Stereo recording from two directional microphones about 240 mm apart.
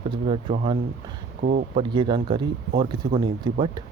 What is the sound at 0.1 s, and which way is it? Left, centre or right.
Speech, centre.